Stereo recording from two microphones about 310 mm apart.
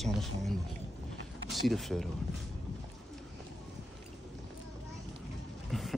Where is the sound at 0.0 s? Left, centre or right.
Centre.